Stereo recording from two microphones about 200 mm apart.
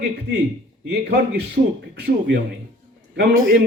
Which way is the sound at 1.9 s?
60° right (ahead or behind).